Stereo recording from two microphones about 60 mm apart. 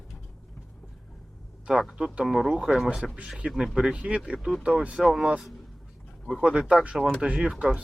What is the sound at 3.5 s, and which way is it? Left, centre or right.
Speech, centre.